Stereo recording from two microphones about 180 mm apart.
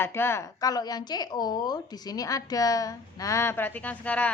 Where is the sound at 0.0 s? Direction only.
15° left (ahead or behind).